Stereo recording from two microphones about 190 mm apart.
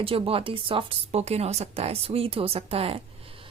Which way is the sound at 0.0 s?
30° right (ahead or behind).